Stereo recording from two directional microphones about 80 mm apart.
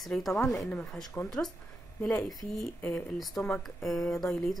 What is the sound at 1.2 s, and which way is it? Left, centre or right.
Speech, left.